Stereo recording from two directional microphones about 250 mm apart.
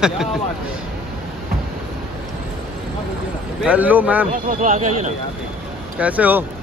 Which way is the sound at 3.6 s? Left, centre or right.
Centre.